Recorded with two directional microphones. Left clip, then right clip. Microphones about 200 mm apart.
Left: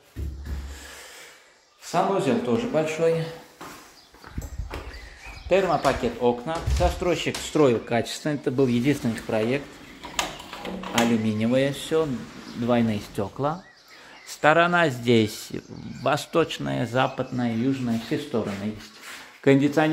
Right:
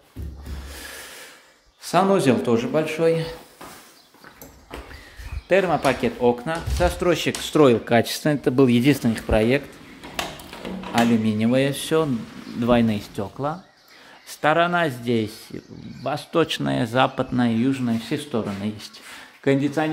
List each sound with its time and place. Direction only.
1.9 s speech: 45° right (ahead or behind); by 3.3 s 30° right (ahead or behind)
5.5 s speech: 35° right (ahead or behind)
11.0 s speech: 20° right (ahead or behind)
12.6 s speech: 15° right (ahead or behind); by 16.3 s 5° left (ahead or behind)
16.4 s speech: 25° right (ahead or behind)
19.4 s speech: 5° left (ahead or behind)